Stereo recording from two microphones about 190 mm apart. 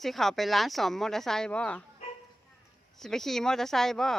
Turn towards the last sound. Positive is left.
turn(degrees=0)  # may be behind; listen again after turning